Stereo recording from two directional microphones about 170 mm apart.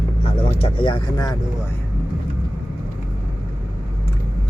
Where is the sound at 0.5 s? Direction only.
35° left (ahead or behind).